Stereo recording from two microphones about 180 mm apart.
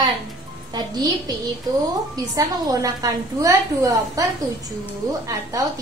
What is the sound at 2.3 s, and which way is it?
A woman's voice, 20° right (ahead or behind).